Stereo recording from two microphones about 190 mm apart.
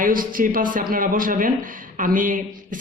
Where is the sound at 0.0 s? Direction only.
45° right (ahead or behind).